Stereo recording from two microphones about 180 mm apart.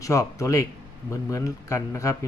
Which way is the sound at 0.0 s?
15° left (ahead or behind).